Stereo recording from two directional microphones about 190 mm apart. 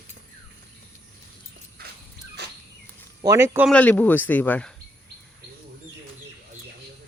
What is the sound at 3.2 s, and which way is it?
Speech, 15° right (ahead or behind).